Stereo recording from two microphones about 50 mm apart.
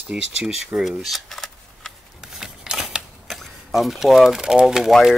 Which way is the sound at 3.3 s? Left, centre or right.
Centre.